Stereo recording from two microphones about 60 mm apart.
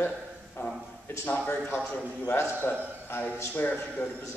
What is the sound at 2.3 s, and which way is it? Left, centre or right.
Speech, left.